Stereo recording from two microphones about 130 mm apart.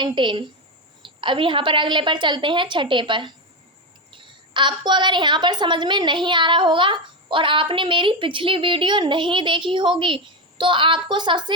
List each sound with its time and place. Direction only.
0.0 s a woman's voice: 35° right (ahead or behind)